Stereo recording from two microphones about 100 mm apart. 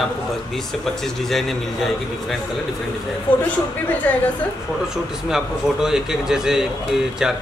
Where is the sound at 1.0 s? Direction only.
5° left (ahead or behind).